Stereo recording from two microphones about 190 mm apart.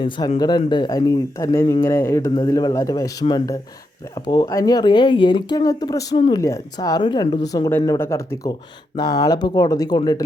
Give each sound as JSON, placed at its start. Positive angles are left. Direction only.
{"t": 0.3, "sound": "speech", "side_deg": 20}